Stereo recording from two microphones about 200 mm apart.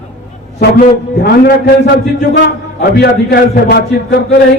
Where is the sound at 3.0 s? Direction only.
50° left (ahead or behind).